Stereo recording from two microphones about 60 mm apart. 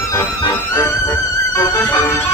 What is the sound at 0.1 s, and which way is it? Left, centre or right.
Music, left.